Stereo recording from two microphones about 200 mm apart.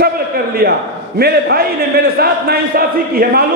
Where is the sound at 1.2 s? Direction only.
50° right (ahead or behind).